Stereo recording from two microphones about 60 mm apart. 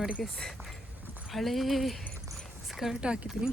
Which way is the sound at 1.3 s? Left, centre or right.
Centre.